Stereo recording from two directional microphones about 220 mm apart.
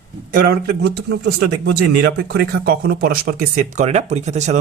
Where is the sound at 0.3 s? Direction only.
40° right (ahead or behind).